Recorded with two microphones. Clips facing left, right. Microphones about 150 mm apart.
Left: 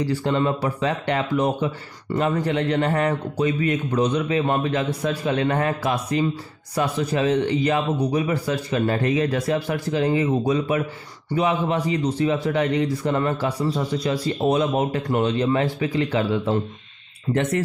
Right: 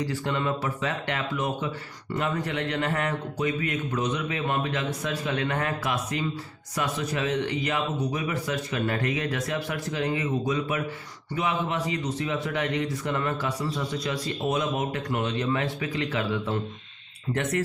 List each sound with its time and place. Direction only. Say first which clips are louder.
0.0 s a man's voice: left 6 dB; 30° left (ahead or behind)